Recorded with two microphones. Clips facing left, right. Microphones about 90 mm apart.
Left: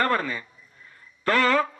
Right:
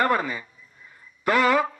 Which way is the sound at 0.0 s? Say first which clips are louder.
Right 1 dB; 15° right (ahead or behind).